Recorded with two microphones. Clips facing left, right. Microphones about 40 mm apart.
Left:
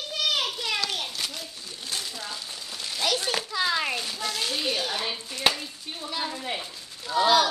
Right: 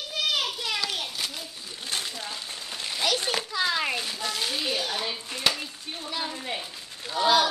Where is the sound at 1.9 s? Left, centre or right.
Right.